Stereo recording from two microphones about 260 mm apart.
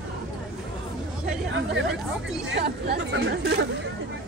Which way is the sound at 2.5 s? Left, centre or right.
Right.